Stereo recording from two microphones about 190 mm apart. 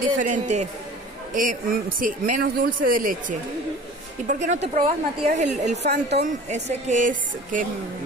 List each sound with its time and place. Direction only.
0.2 s a woman's voice: 40° right (ahead or behind)
5.8 s speech: 60° right (ahead or behind)
6.5 s a woman's voice: 40° right (ahead or behind)